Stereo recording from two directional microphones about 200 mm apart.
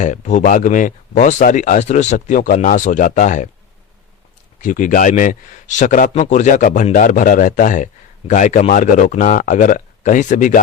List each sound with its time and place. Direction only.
0.0 s speech: 40° left (ahead or behind)
4.6 s speech: 40° left (ahead or behind)